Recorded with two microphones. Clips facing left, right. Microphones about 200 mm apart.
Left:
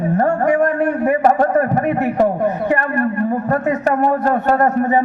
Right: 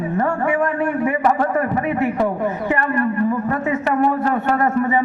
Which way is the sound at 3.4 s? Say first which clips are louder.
Left 3 dB; 40° left (ahead or behind).